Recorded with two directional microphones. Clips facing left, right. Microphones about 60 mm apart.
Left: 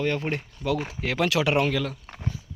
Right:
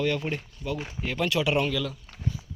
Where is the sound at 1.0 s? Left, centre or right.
Left.